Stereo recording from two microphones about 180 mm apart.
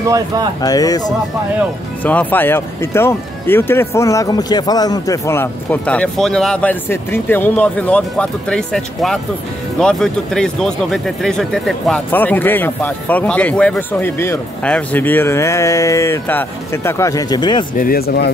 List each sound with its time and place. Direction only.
0.0 s speech: 20° right (ahead or behind)
0.6 s speech: 20° left (ahead or behind)
2.0 s speech: 10° left (ahead or behind); by 17.6 s 25° left (ahead or behind)
17.7 s speech: 55° left (ahead or behind)